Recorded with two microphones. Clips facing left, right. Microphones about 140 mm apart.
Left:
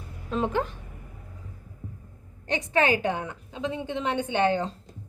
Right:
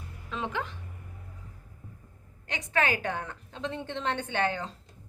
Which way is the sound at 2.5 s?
25° left (ahead or behind).